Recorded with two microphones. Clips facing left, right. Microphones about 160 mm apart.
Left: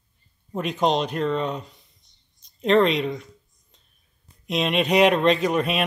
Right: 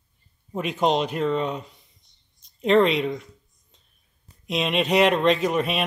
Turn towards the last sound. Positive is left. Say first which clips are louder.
# left 1 dB
turn(degrees=0)  # may be behind; listen again after turning